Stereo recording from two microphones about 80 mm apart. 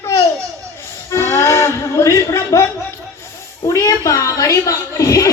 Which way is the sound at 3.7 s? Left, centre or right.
Left.